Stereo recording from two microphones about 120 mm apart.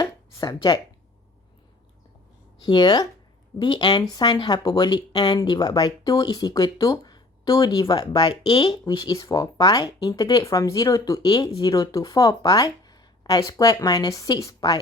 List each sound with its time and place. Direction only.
0.0 s a sound: 30° left (ahead or behind)
2.6 s speech: 35° left (ahead or behind)
8.8 s speech: 35° left (ahead or behind)